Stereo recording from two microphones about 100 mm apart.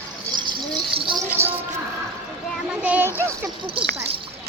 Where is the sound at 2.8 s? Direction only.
15° right (ahead or behind).